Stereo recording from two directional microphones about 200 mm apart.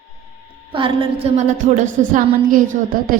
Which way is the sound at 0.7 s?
25° right (ahead or behind).